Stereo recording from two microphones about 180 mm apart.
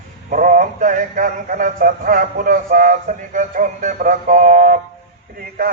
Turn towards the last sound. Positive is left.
turn(degrees=-55)  # may be behind; listen again after turning